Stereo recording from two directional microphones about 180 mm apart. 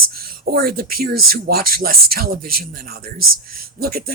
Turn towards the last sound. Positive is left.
turn(degrees=-55)  # may be behind; listen again after turning